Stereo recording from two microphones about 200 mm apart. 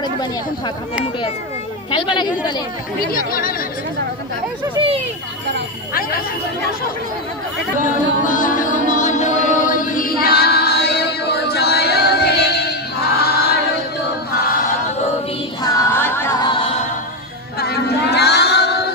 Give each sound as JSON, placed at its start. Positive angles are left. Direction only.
{"t": 1.9, "sound": "speech", "side_deg": 25}
{"t": 3.1, "sound": "speech", "side_deg": 45}
{"t": 4.7, "sound": "speech", "side_deg": -30}
{"t": 5.9, "sound": "speech", "side_deg": 45}
{"t": 7.8, "sound": "music", "side_deg": 40}
{"t": 10.2, "sound": "female singing", "side_deg": 50}
{"t": 15.6, "sound": "a sound", "side_deg": 15}
{"t": 17.6, "sound": "child singing", "side_deg": 55}